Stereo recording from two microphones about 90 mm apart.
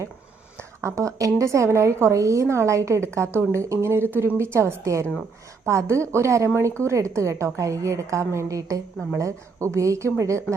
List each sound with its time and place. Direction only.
0.8 s a woman's voice: 35° right (ahead or behind)